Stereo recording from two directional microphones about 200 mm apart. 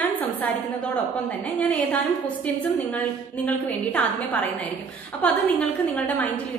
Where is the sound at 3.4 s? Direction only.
5° left (ahead or behind).